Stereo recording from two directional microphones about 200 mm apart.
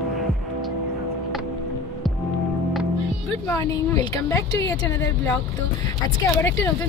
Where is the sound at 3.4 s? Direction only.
15° left (ahead or behind).